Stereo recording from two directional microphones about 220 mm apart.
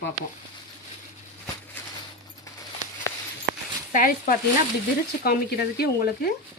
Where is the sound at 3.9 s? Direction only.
40° left (ahead or behind).